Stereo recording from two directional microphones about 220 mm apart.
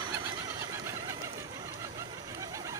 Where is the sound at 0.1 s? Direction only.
15° right (ahead or behind).